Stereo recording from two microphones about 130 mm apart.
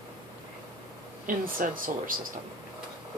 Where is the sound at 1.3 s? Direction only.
90° right.